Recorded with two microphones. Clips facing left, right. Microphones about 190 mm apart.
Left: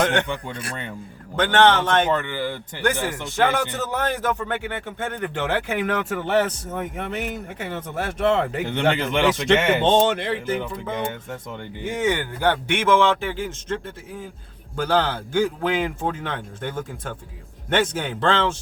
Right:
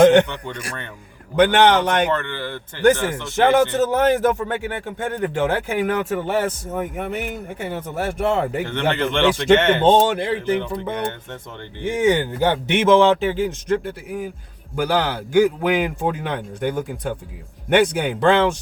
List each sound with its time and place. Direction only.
0.0 s a sound: 15° right (ahead or behind)
0.3 s speech: 10° left (ahead or behind)
1.4 s a man's voice: 15° right (ahead or behind)
2.1 s speech: 10° left (ahead or behind)
3.3 s a man's voice: 15° right (ahead or behind)
8.6 s speech: 15° left (ahead or behind)
9.8 s a man's voice: 10° right (ahead or behind)
11.9 s a man's voice: 15° right (ahead or behind)